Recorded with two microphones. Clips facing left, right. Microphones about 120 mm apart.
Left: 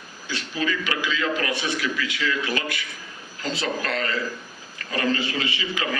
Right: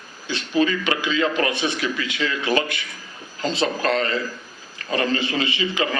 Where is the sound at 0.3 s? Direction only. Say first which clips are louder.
Right 6 dB; 25° right (ahead or behind).